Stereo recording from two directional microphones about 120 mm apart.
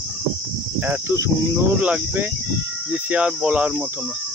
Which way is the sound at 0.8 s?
15° right (ahead or behind).